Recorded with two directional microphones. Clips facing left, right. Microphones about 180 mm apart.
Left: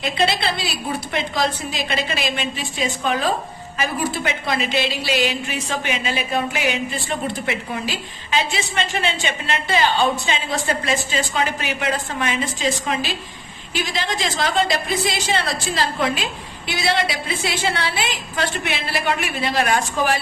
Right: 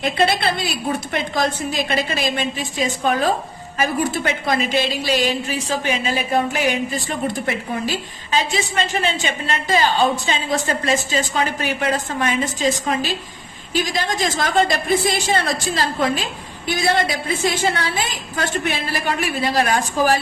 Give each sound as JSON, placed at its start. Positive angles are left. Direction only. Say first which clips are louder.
{"t": 0.0, "sound": "a woman's voice", "louder": "right 2 dB", "side_deg": -50}